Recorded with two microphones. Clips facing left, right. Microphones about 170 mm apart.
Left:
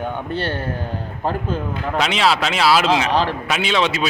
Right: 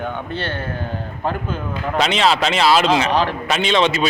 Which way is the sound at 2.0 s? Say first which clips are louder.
Right 2 dB; 5° left (ahead or behind).